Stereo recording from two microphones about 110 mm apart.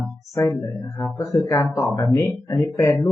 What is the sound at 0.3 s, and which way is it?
Speech, 30° left (ahead or behind).